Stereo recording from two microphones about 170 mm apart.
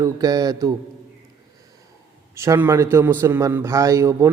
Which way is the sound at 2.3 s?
15° right (ahead or behind).